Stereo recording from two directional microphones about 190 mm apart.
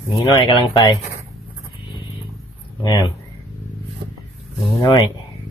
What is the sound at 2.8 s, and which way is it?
Speech, 20° left (ahead or behind).